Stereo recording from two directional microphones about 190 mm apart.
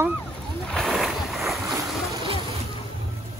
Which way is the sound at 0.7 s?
Centre (ahead or behind).